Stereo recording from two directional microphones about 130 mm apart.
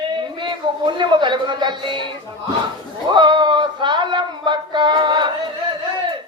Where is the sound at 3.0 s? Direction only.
35° right (ahead or behind).